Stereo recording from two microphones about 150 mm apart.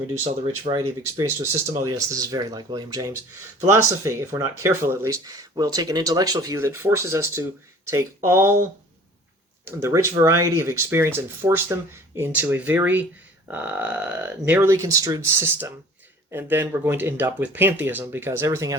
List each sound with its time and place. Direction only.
0.7 s speech: 25° right (ahead or behind)
9.6 s speech: 15° right (ahead or behind)